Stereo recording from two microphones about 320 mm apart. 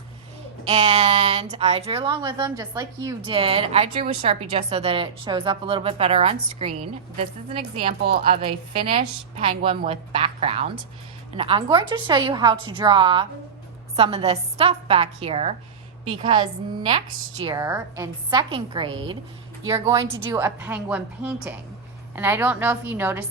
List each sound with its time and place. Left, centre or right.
0.6 s a woman's voice: right